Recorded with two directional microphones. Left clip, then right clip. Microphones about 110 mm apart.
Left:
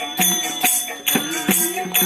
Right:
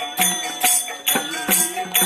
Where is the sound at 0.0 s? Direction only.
Centre (ahead or behind).